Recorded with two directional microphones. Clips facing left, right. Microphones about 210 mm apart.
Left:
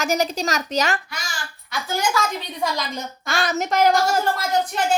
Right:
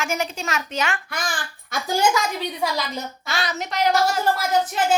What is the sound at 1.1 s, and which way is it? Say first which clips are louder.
Speech: right 5 dB; 55° right (ahead or behind).